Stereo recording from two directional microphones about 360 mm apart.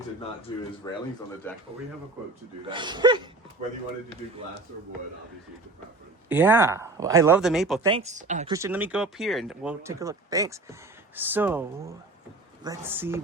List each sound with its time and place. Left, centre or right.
0.5 s speech: centre
2.6 s speech: centre
6.2 s speech: centre
7.9 s speech: centre
8.5 s speech: centre